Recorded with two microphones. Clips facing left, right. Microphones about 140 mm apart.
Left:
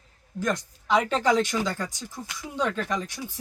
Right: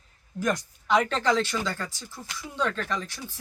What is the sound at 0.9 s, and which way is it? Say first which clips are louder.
Speech: left 1 dB; 5° left (ahead or behind).